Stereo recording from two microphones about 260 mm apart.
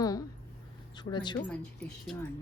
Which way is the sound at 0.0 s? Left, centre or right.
Centre.